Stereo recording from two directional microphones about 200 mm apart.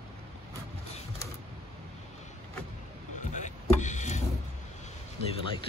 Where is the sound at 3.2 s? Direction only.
40° left (ahead or behind).